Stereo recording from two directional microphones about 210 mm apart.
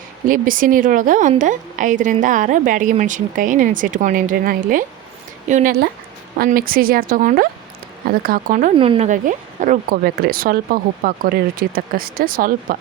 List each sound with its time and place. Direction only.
0.3 s a woman's voice: 40° right (ahead or behind)
8.7 s speech: 25° right (ahead or behind); by 12.7 s 40° right (ahead or behind)